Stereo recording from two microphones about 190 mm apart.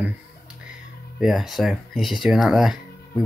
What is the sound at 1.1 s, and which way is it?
Speech, centre (ahead or behind).